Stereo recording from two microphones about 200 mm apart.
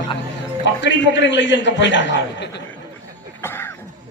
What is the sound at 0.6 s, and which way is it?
Speech, 65° left (ahead or behind).